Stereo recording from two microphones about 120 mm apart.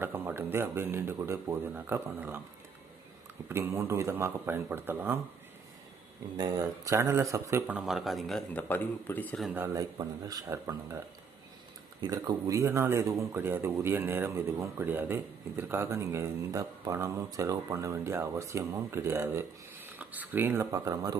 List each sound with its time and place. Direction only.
0.0 s speech: 20° right (ahead or behind)
3.5 s speech: 20° right (ahead or behind)
6.3 s speech: 30° right (ahead or behind)
7.7 s speech: 5° right (ahead or behind)
8.5 s a man's voice: 15° left (ahead or behind)
9.6 s speech: 25° right (ahead or behind)
12.1 s speech: 25° right (ahead or behind)